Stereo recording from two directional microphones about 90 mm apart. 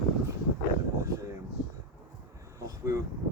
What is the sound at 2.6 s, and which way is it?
Vehicle, 35° right (ahead or behind).